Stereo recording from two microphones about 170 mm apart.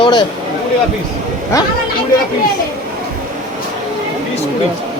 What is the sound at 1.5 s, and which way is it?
Speech, 20° left (ahead or behind).